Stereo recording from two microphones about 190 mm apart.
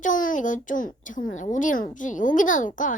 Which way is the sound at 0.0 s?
45° left (ahead or behind).